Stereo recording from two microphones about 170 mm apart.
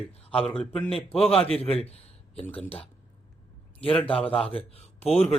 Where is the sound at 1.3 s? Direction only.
35° left (ahead or behind).